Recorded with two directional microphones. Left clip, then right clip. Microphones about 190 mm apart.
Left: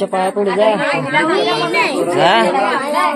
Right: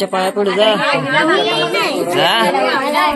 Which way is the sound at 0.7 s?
40° left (ahead or behind).